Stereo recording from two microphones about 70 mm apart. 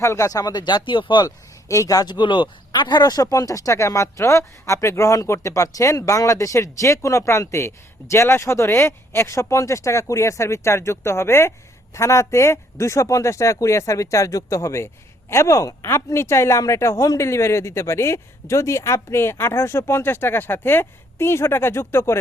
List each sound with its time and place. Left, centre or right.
0.0 s speech: left
1.6 s speech: left
2.7 s speech: left